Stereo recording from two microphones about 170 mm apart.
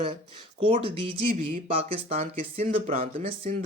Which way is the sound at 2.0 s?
35° right (ahead or behind).